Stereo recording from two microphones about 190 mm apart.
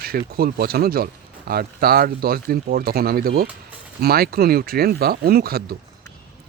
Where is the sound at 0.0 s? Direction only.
50° right (ahead or behind).